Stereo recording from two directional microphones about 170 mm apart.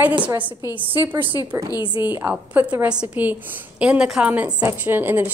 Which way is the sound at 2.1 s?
10° right (ahead or behind).